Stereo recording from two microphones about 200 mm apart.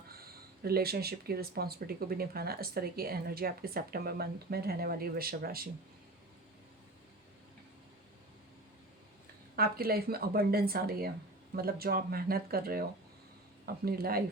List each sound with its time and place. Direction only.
0.1 s speech: 50° right (ahead or behind)
9.6 s speech: 50° right (ahead or behind)
13.8 s speech: 50° right (ahead or behind)